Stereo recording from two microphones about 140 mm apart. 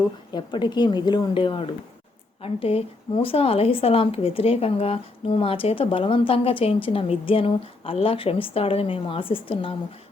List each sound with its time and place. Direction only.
0.3 s a woman's voice: 30° left (ahead or behind)